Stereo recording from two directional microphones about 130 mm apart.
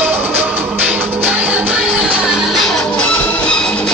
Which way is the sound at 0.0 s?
15° right (ahead or behind).